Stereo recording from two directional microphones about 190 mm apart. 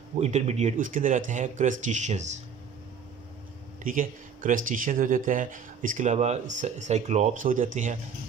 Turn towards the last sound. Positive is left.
turn(degrees=-40)  # may be behind; listen again after turning